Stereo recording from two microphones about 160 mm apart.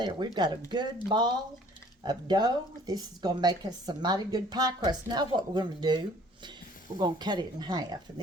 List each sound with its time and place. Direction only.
0.0 s a woman's voice: 25° right (ahead or behind)
7.0 s a woman's voice: 25° right (ahead or behind)